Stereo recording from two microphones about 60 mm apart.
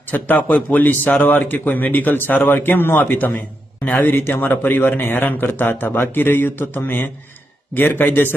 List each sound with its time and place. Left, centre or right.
0.1 s a man's voice: left